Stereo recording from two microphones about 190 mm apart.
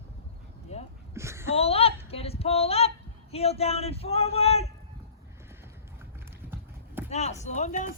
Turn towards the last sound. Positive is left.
turn(degrees=40)  # may be behind; listen again after turning